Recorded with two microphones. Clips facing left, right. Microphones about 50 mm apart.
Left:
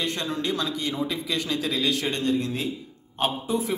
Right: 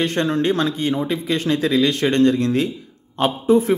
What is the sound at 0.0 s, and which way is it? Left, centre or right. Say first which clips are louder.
Speech: right 9 dB; right.